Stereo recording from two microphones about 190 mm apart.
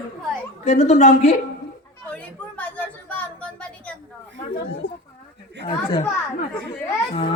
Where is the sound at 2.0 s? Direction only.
10° left (ahead or behind).